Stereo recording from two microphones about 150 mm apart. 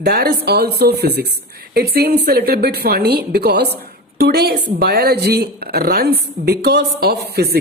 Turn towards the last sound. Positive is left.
turn(degrees=-90)